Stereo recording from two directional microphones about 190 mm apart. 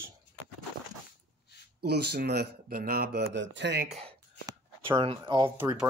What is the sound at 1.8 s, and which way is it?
Speech, 60° right (ahead or behind).